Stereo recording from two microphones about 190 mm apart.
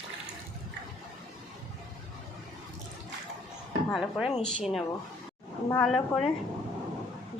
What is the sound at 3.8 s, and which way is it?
A woman's voice, 5° left (ahead or behind).